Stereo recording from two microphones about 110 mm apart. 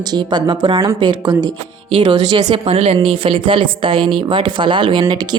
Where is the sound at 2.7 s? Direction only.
65° right (ahead or behind).